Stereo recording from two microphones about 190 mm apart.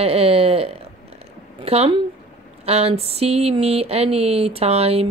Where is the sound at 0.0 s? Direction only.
30° right (ahead or behind).